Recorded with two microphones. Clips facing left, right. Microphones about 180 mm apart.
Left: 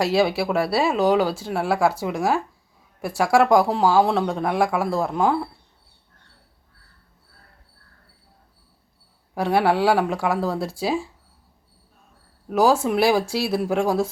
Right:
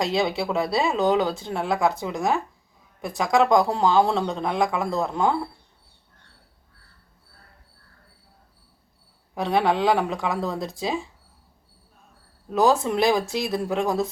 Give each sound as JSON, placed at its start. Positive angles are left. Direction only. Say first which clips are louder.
{"t": 0.0, "sound": "speech", "louder": "left 4 dB", "side_deg": 5}
{"t": 9.3, "sound": "speech", "louder": "left 2 dB", "side_deg": 10}
{"t": 12.5, "sound": "speech", "louder": "left 2 dB", "side_deg": 10}